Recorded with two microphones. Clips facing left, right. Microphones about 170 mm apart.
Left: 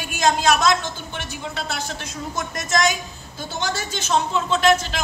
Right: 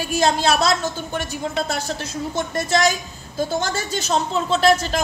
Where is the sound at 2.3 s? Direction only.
30° right (ahead or behind).